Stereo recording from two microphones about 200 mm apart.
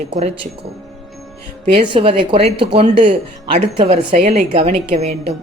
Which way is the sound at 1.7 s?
25° right (ahead or behind).